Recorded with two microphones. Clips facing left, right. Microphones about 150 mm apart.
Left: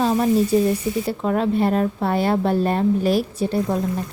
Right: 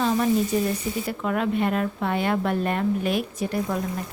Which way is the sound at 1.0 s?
30° left (ahead or behind).